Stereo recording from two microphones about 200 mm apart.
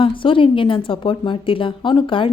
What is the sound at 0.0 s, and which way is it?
A woman's voice, 25° left (ahead or behind).